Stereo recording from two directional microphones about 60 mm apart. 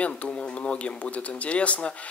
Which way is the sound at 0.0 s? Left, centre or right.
Centre.